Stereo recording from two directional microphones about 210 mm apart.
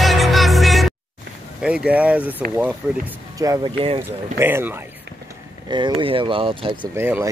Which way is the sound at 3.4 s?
15° right (ahead or behind).